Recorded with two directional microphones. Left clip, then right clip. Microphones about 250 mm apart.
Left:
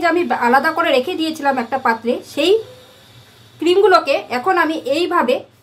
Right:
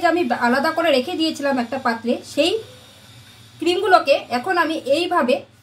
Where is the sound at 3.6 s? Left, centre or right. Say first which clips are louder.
Left 4 dB; centre.